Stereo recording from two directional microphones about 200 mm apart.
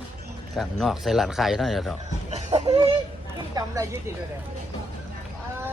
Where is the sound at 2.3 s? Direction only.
35° right (ahead or behind).